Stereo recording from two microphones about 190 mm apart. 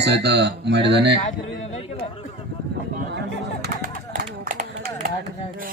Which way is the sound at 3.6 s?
45° right (ahead or behind).